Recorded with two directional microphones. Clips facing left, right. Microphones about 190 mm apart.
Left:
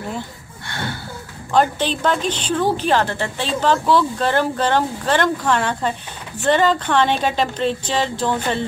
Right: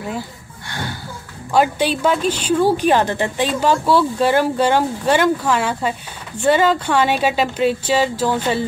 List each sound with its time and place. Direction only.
1.5 s a woman's voice: 10° right (ahead or behind)